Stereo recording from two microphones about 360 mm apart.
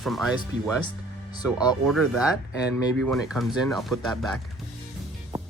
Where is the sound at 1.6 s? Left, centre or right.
Centre.